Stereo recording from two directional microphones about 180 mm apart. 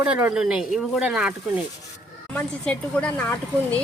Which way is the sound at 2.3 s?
5° left (ahead or behind).